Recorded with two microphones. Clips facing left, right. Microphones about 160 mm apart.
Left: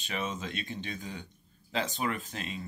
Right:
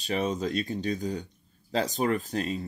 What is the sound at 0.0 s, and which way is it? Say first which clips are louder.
Speech: right 8 dB; 35° right (ahead or behind).